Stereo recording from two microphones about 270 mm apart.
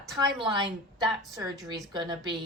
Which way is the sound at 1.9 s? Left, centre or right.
Centre.